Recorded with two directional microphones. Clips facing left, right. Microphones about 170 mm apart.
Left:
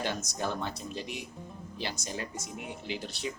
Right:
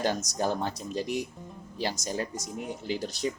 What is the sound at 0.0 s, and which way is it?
Speech, 40° right (ahead or behind).